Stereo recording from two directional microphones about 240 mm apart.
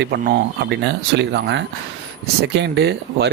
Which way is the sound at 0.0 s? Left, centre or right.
Right.